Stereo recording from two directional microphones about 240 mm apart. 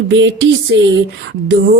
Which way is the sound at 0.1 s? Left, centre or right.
Right.